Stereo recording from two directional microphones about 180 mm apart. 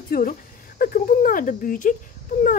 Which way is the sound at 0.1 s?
50° left (ahead or behind).